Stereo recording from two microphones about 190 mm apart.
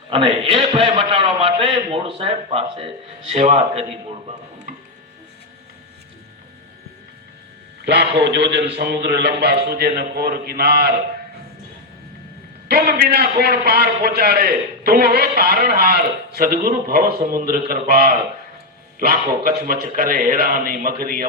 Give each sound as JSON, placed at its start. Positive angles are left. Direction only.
{"t": 0.1, "sound": "a man's voice", "side_deg": -30}
{"t": 8.2, "sound": "a man's voice", "side_deg": -65}
{"t": 12.6, "sound": "a man's voice", "side_deg": -55}